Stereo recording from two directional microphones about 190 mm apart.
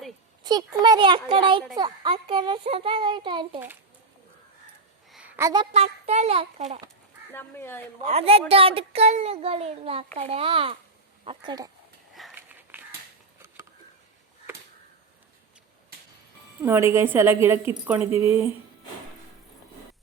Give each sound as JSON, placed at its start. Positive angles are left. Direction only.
{"t": 0.4, "sound": "a child's voice", "side_deg": -20}
{"t": 5.4, "sound": "a woman's voice", "side_deg": -20}
{"t": 5.7, "sound": "a child's voice", "side_deg": -35}
{"t": 7.3, "sound": "speech", "side_deg": 10}
{"t": 8.0, "sound": "a child's voice", "side_deg": -30}
{"t": 12.2, "sound": "a sound", "side_deg": 0}
{"t": 16.6, "sound": "a woman's voice", "side_deg": -15}